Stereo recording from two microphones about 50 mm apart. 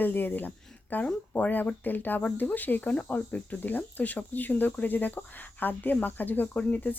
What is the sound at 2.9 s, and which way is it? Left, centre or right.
Speech, left.